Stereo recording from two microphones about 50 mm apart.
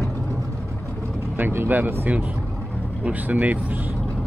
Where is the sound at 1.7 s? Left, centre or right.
Right.